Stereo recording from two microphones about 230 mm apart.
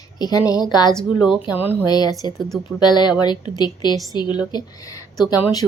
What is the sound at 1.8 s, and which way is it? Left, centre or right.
A woman's voice, centre.